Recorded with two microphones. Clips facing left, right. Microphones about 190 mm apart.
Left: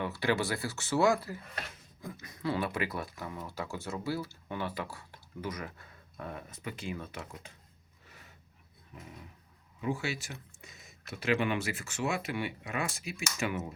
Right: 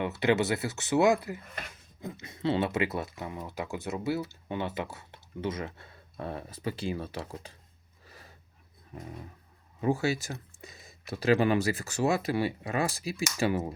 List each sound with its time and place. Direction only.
0.0 s speech: 20° right (ahead or behind)
8.0 s a sound: 35° right (ahead or behind)
9.8 s speech: 40° right (ahead or behind)